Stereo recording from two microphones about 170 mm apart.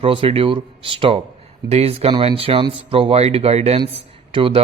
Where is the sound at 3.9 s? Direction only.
35° right (ahead or behind).